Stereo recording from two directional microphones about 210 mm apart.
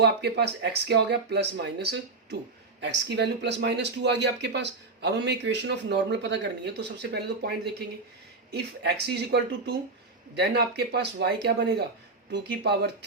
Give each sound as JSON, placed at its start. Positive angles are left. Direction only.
{"t": 0.0, "sound": "speech", "side_deg": -50}